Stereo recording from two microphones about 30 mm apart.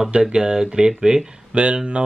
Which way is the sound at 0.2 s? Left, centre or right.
Right.